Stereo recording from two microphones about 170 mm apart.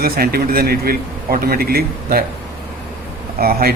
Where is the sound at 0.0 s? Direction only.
65° right (ahead or behind).